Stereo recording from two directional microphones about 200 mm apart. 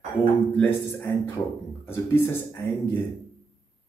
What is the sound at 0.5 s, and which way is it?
Speech, 10° left (ahead or behind).